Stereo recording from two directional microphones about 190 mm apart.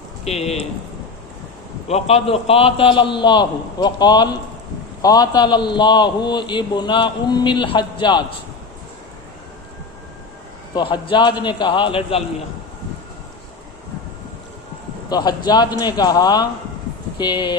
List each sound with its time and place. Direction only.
0.3 s speech: 35° left (ahead or behind)
1.9 s a man's voice: 35° left (ahead or behind)
10.8 s a man's voice: 25° left (ahead or behind)
15.1 s a man's voice: 20° left (ahead or behind)